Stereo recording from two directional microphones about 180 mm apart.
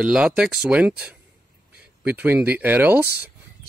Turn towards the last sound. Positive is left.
turn(degrees=-10)  # may be behind; listen again after turning